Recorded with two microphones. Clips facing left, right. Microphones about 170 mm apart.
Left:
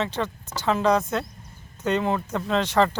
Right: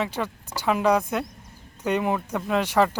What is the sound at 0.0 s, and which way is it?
Speech, 10° right (ahead or behind).